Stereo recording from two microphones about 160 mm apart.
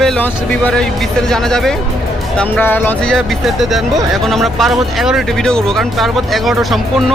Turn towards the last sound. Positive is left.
turn(degrees=0)  # may be behind; listen again after turning